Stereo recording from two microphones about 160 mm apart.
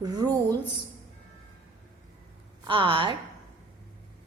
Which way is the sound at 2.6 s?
30° right (ahead or behind).